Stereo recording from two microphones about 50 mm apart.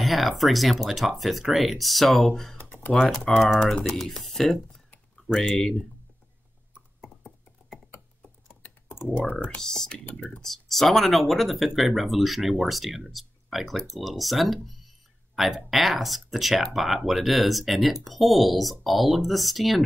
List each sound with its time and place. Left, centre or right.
0.0 s speech: centre
2.5 s computer keyboard: left
3.2 s speech: centre
7.0 s a sound: centre
8.9 s computer keyboard: left
9.3 s speech: left
9.6 s speech: centre
10.4 s speech: centre